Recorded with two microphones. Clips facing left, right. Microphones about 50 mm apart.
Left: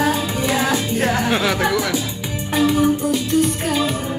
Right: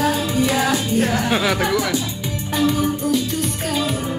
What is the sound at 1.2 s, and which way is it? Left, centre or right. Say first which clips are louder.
Chatter: left 1 dB; centre.